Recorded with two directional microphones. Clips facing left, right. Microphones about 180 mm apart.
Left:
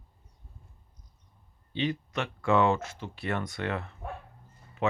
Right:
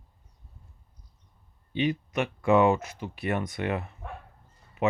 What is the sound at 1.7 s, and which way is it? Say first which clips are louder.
Speech: right 3 dB; 20° right (ahead or behind).